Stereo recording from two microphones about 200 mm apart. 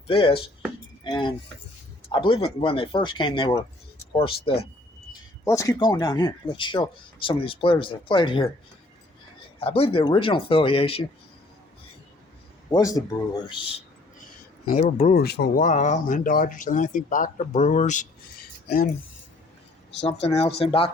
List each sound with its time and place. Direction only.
0.1 s speech: 25° left (ahead or behind)
5.5 s speech: 15° left (ahead or behind)
9.6 s speech: 30° left (ahead or behind)
12.7 s speech: 15° left (ahead or behind)
14.7 s speech: 40° left (ahead or behind)
15.2 s speech: 55° left (ahead or behind); by 18.1 s 40° left (ahead or behind)
20.0 s speech: 30° left (ahead or behind)